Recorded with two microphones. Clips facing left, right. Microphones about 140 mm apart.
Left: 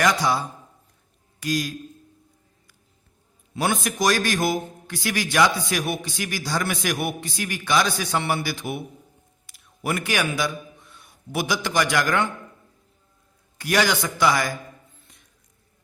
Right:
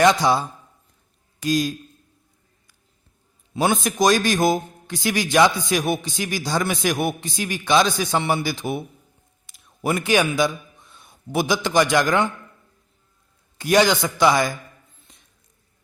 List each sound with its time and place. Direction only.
0.0 s a man's voice: 25° right (ahead or behind)
3.5 s a man's voice: 20° right (ahead or behind)
13.6 s a man's voice: 20° right (ahead or behind)